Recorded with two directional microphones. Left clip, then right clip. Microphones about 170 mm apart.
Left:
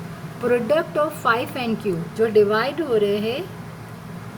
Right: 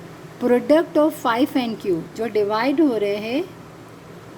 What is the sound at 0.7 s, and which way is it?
Speech, 65° right (ahead or behind).